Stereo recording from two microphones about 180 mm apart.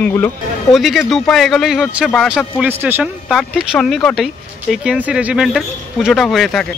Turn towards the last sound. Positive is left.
turn(degrees=0)  # may be behind; listen again after turning